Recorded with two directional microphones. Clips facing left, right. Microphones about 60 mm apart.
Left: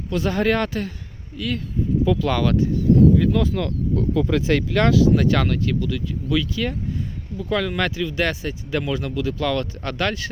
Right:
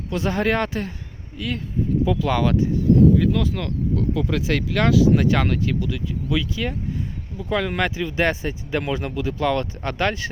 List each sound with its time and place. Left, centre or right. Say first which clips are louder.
0.1 s speech: left 1 dB; right
3.2 s speech: left 1 dB; centre; by 10.2 s right